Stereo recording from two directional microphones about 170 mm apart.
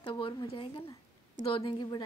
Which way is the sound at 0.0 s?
30° left (ahead or behind).